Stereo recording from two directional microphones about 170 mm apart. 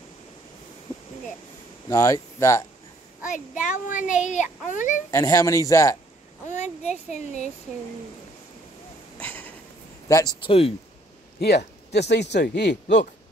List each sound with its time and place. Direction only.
1.9 s speech: 20° left (ahead or behind)
3.3 s a child's voice: 50° left (ahead or behind)
5.1 s speech: 20° left (ahead or behind)
6.5 s a child's voice: 40° left (ahead or behind)
9.2 s a sound: 10° left (ahead or behind)
10.0 s speech: 20° left (ahead or behind)
10.4 s speech: 35° left (ahead or behind)
11.3 s speech: 75° left (ahead or behind)